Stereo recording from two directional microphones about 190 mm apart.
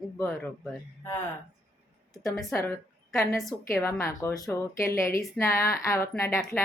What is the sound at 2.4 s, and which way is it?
Speech, 15° left (ahead or behind).